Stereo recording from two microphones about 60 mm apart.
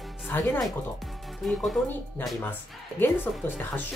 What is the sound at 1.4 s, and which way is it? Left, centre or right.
Speech, centre.